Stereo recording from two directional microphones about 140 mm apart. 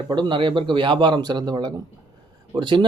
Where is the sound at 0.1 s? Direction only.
35° right (ahead or behind).